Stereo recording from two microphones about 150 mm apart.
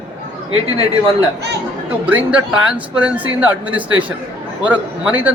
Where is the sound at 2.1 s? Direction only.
10° right (ahead or behind).